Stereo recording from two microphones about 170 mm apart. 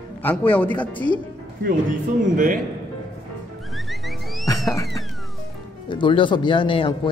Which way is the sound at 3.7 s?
Centre (ahead or behind).